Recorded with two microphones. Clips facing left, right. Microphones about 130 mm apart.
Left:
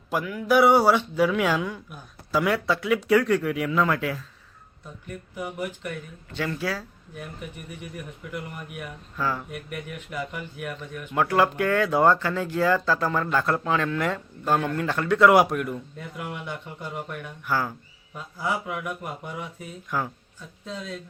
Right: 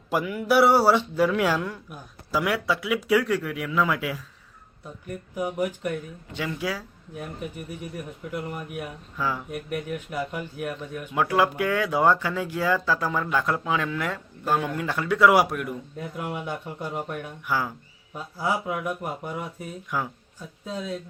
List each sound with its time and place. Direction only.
0.1 s speech: 5° right (ahead or behind)
5.4 s a man's voice: 40° right (ahead or behind)
6.3 s speech: 10° right (ahead or behind)
7.9 s a man's voice: 40° right (ahead or behind)
9.1 s speech: 10° right (ahead or behind)
9.7 s a man's voice: 40° right (ahead or behind)
11.1 s speech: 5° right (ahead or behind)
16.0 s a man's voice: 40° right (ahead or behind)
17.4 s speech: 10° right (ahead or behind)
18.1 s a man's voice: 35° right (ahead or behind)
19.9 s speech: 10° right (ahead or behind)